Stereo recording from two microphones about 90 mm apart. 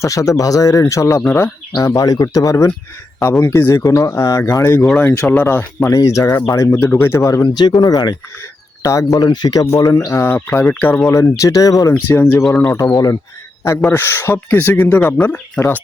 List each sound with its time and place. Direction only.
0.0 s speech: 35° left (ahead or behind)
3.2 s speech: 30° left (ahead or behind)
5.9 s speech: 35° left (ahead or behind)
7.4 s speech: 50° left (ahead or behind)
8.8 s speech: 35° left (ahead or behind)
9.6 s speech: 35° left (ahead or behind)
10.7 s speech: 20° left (ahead or behind)
11.1 s speech: 35° left (ahead or behind)
11.9 s speech: 25° left (ahead or behind)
12.6 s speech: 35° left (ahead or behind)
13.9 s speech: 25° left (ahead or behind)